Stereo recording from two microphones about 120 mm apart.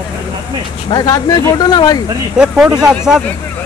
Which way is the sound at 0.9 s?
30° left (ahead or behind).